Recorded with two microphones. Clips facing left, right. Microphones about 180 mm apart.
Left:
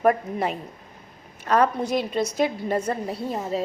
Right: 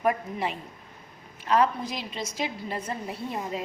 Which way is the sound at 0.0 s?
45° left (ahead or behind).